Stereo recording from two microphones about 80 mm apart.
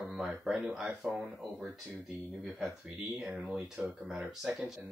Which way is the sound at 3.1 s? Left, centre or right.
Centre.